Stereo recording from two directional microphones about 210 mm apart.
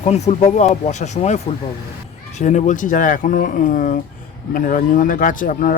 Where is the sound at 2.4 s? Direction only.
35° left (ahead or behind).